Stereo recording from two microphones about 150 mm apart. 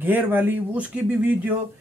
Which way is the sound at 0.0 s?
10° right (ahead or behind).